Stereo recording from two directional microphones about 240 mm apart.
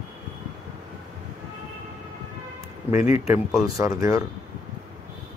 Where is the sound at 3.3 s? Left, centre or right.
Centre.